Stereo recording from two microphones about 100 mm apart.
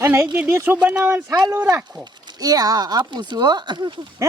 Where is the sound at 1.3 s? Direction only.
35° right (ahead or behind).